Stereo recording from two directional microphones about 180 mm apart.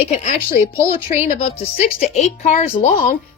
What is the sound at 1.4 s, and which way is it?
Speech, 35° left (ahead or behind).